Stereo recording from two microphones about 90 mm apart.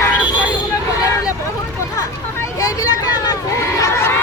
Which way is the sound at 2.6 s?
40° left (ahead or behind).